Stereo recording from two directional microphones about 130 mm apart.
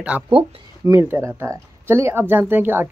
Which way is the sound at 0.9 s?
20° right (ahead or behind).